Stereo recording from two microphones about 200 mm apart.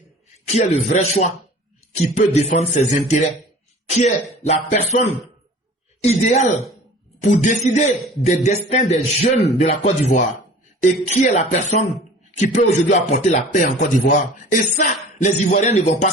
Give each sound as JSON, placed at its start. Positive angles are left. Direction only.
{"t": 0.4, "sound": "speech", "side_deg": 35}